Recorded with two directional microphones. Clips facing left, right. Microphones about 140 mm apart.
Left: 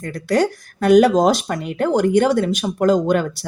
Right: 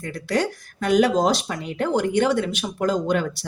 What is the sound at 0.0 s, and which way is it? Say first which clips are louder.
A woman's voice: left 5 dB; 45° left (ahead or behind).